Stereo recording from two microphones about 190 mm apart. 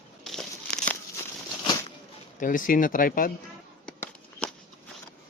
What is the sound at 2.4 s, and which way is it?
Speech, 45° left (ahead or behind).